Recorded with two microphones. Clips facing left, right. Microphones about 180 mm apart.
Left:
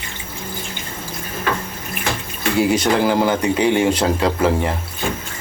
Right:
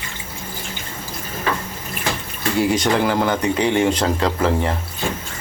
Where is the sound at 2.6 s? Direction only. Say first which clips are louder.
Left 2 dB; 5° left (ahead or behind).